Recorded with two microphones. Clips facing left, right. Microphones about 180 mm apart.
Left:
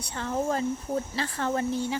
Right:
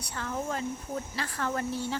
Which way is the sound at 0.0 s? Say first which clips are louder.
Left 5 dB; 25° left (ahead or behind).